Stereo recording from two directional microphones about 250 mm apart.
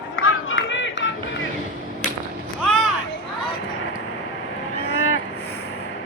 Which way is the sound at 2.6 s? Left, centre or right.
Centre.